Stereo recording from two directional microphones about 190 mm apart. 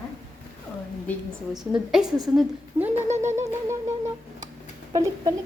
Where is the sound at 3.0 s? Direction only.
40° right (ahead or behind).